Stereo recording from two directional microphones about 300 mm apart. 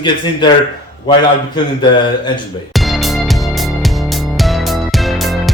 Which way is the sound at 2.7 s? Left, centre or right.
Centre.